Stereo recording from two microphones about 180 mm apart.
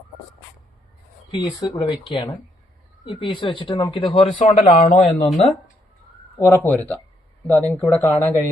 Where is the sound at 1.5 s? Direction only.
25° left (ahead or behind).